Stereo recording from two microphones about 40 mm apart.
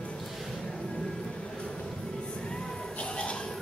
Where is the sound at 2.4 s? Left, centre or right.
Left.